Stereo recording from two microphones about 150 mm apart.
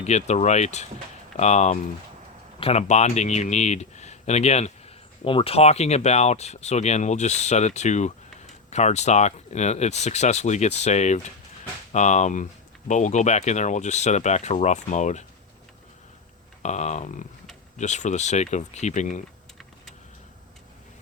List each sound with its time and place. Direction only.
0.0 s speech: 50° left (ahead or behind)
16.6 s speech: 50° left (ahead or behind)